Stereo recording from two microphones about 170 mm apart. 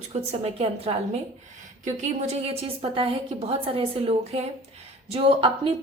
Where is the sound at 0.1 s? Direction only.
35° right (ahead or behind).